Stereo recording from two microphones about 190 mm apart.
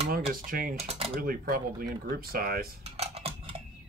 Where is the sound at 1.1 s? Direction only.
50° right (ahead or behind).